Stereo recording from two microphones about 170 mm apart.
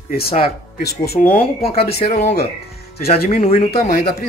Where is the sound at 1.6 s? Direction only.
35° left (ahead or behind).